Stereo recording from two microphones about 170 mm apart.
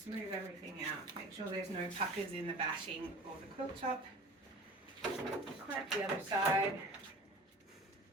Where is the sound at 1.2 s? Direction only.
30° right (ahead or behind).